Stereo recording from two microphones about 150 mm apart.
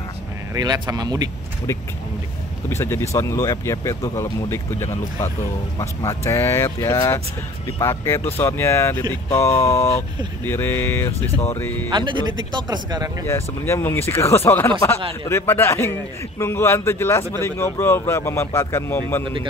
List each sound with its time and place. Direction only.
0.6 s speech: 25° right (ahead or behind)
2.7 s speech: 15° left (ahead or behind)
11.9 s speech: 30° right (ahead or behind)
13.3 s speech: 15° left (ahead or behind)